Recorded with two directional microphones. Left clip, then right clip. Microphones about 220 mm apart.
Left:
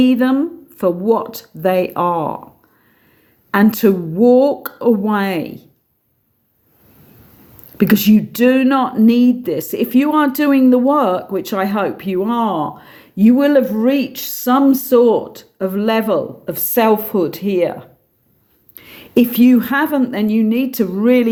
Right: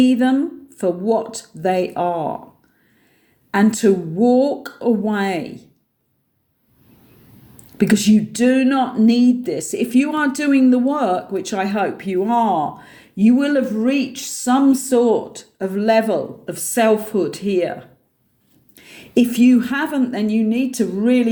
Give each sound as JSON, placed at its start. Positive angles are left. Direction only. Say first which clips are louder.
{"t": 0.0, "sound": "speech", "louder": "left 2 dB", "side_deg": 45}
{"t": 3.5, "sound": "speech", "louder": "left 2 dB", "side_deg": 45}
{"t": 7.8, "sound": "speech", "louder": "left 2 dB", "side_deg": 45}